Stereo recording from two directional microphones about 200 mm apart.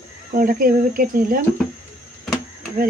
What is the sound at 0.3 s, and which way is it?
Speech, 45° right (ahead or behind).